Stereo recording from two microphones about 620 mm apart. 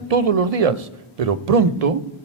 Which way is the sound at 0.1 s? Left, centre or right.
Right.